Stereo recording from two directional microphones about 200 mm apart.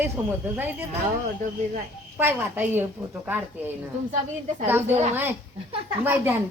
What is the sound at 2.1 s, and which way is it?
Speech, 10° right (ahead or behind).